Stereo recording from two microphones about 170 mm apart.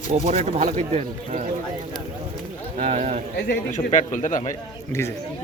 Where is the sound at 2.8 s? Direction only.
40° right (ahead or behind).